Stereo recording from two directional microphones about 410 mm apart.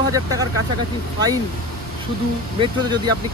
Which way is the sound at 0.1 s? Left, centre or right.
Centre.